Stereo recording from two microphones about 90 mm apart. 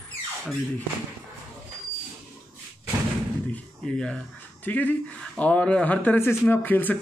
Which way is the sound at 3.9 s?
10° left (ahead or behind).